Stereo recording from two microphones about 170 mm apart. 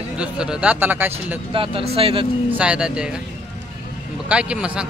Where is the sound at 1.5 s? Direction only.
30° right (ahead or behind).